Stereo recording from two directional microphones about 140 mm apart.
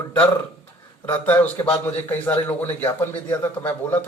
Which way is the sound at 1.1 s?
10° left (ahead or behind).